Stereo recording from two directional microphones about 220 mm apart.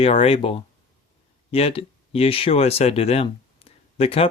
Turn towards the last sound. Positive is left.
turn(degrees=25)  # may be behind; listen again after turning